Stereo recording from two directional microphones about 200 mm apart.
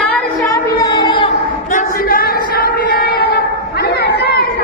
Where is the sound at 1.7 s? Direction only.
40° left (ahead or behind).